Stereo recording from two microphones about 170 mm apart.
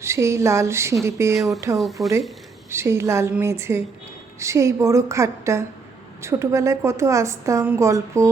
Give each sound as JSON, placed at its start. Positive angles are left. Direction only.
{"t": 0.0, "sound": "a woman's voice", "side_deg": -15}
{"t": 1.4, "sound": "speech", "side_deg": 0}
{"t": 2.6, "sound": "a woman's voice", "side_deg": -15}